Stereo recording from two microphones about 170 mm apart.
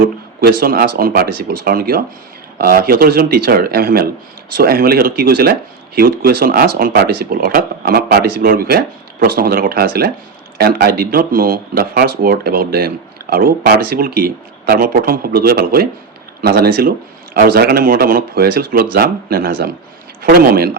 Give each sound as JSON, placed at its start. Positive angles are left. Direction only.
{"t": 0.0, "sound": "speech", "side_deg": -60}